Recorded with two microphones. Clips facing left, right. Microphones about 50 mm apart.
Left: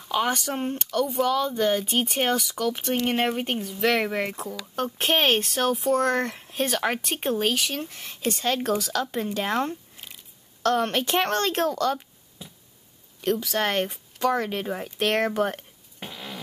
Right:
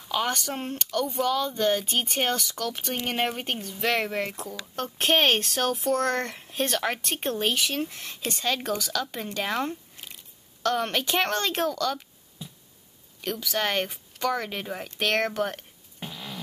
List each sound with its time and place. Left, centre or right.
0.0 s speech: centre
8.3 s speech: centre
8.5 s speech: centre
8.9 s speech: centre
9.7 s a sound: centre
10.7 s speech: centre
11.7 s speech: centre
13.2 s speech: centre
16.0 s fart: left